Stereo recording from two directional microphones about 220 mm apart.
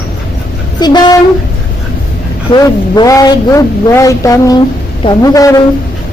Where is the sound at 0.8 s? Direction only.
20° left (ahead or behind).